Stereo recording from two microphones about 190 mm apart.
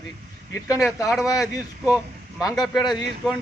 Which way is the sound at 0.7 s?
5° right (ahead or behind).